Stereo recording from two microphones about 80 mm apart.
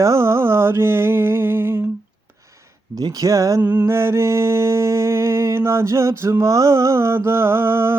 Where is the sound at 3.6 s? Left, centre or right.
Centre.